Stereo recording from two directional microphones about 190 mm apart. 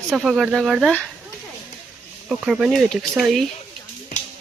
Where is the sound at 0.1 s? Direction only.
Centre (ahead or behind).